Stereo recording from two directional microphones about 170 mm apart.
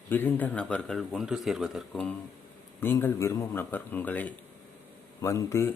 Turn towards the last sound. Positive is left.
turn(degrees=15)  # may be behind; listen again after turning